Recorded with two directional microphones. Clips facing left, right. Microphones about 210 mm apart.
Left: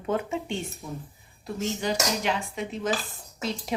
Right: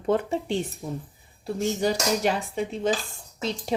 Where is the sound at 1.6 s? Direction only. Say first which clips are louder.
Right 3 dB; 40° right (ahead or behind).